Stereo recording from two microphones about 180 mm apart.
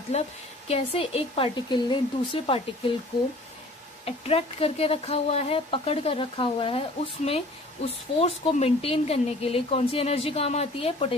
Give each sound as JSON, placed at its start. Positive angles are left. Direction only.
{"t": 0.1, "sound": "speech", "side_deg": 40}
{"t": 4.0, "sound": "speech", "side_deg": 30}